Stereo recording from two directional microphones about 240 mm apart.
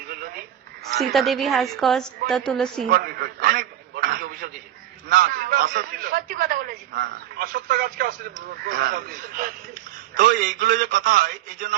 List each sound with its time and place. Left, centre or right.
1.1 s a woman's voice: centre
2.8 s a man's voice: right